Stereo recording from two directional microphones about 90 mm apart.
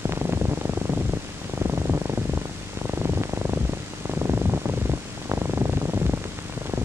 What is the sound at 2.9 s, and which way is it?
Purr, 30° right (ahead or behind).